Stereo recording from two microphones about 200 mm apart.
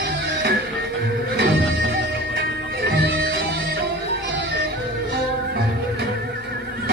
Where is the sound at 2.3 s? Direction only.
50° right (ahead or behind).